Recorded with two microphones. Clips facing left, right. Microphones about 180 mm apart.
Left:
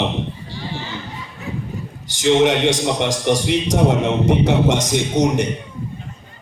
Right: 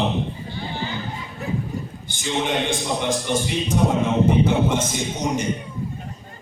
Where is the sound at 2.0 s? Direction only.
80° left.